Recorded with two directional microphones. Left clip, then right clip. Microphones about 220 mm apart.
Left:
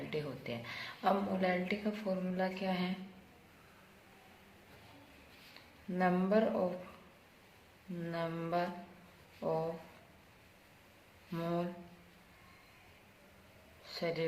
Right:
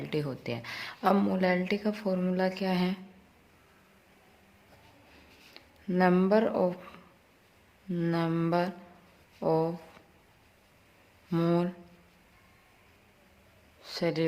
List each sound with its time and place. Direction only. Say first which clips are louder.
0.1 s speech: right 8 dB; 50° right (ahead or behind)
5.9 s speech: right 7 dB; 50° right (ahead or behind)
7.9 s speech: right 9 dB; 50° right (ahead or behind)
11.3 s speech: right 9 dB; 50° right (ahead or behind)
13.8 s speech: right 7 dB; 50° right (ahead or behind)